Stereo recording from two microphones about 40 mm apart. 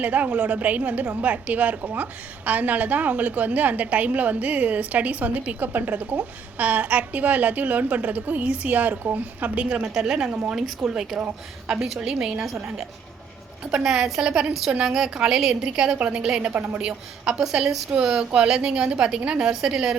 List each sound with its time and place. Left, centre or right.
0.0 s a woman's voice: right
9.6 s a woman's voice: right
9.9 s a woman's voice: centre
13.7 s a woman's voice: right
16.0 s a woman's voice: right
16.8 s a woman's voice: centre